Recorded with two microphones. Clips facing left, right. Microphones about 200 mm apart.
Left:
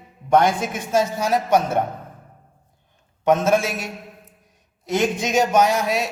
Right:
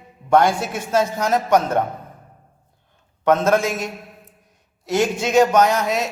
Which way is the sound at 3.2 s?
15° left (ahead or behind).